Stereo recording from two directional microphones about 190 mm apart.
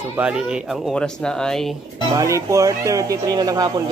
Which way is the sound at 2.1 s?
15° right (ahead or behind).